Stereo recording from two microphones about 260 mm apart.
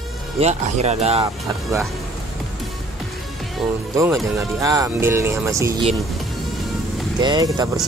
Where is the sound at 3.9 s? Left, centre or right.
Centre.